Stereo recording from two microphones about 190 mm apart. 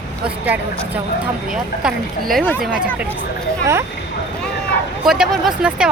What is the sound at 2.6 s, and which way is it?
Speech, 5° right (ahead or behind).